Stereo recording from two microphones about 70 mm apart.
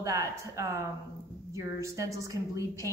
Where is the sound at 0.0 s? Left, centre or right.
Right.